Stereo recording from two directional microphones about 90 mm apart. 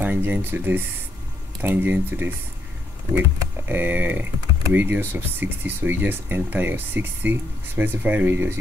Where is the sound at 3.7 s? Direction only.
20° right (ahead or behind).